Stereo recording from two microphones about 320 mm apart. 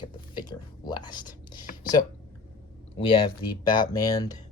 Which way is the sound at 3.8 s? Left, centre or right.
Centre.